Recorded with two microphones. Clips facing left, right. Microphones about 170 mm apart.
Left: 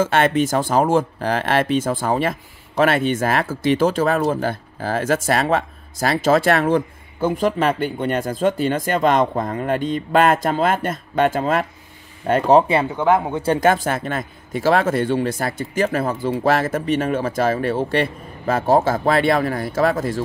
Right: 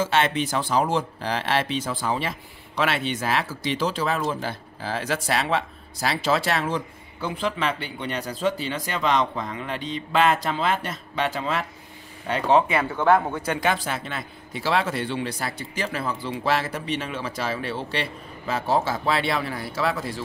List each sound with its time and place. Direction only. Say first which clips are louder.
0.0 s speech: left 6 dB; 50° left (ahead or behind)
12.9 s speech: right 1 dB; 15° left (ahead or behind)
13.6 s speech: left 8 dB; 45° left (ahead or behind)